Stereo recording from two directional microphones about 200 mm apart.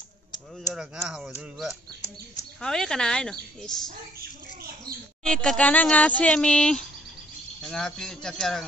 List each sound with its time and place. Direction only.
0.7 s speech: 5° right (ahead or behind)
4.2 s a sound: 50° right (ahead or behind)
5.2 s speech: 5° left (ahead or behind)